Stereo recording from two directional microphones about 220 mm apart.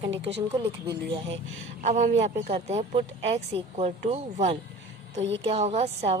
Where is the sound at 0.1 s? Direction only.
55° right (ahead or behind).